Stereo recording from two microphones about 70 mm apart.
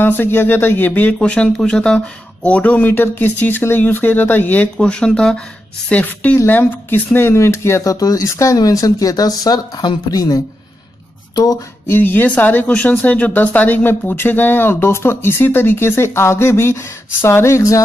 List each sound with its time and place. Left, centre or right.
0.0 s speech: left
4.7 s speech: centre
5.9 s speech: left
6.3 s speech: left
11.9 s speech: left